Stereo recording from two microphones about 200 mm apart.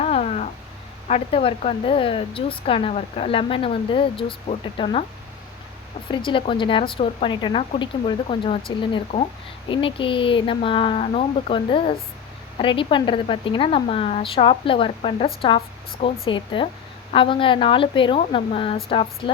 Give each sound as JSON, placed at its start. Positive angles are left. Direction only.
{"t": 0.0, "sound": "a sound", "side_deg": 35}
{"t": 1.0, "sound": "speech", "side_deg": 30}
{"t": 6.1, "sound": "speech", "side_deg": 25}